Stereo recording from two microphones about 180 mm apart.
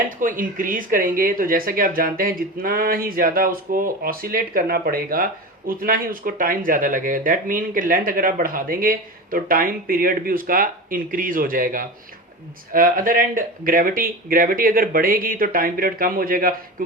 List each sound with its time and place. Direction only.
0.2 s speech: 50° right (ahead or behind)